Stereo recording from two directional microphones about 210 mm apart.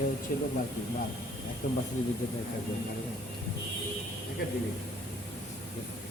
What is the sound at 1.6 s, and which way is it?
Speech, 40° left (ahead or behind).